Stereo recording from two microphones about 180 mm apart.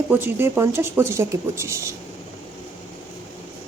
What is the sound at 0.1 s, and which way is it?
Speech, 10° right (ahead or behind).